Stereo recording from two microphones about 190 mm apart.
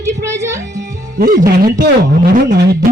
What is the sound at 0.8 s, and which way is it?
Music, 55° right (ahead or behind).